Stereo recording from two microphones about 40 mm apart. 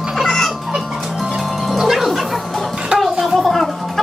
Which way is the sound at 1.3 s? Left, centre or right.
Centre.